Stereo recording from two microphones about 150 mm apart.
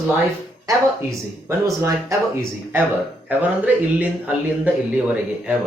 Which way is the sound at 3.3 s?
10° right (ahead or behind).